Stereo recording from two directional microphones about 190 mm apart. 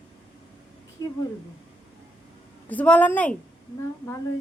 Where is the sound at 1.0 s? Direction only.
20° left (ahead or behind).